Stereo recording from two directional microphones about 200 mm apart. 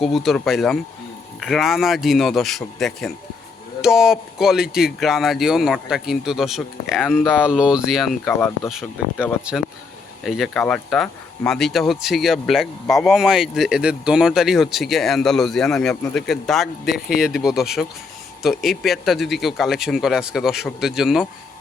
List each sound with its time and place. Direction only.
0.0 s speech: centre (ahead or behind)